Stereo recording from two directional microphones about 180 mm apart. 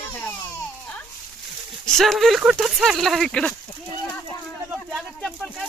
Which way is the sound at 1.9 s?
Centre (ahead or behind).